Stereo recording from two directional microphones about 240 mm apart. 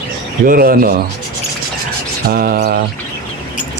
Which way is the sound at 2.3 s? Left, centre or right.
Right.